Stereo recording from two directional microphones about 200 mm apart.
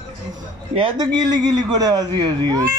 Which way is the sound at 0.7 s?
20° right (ahead or behind).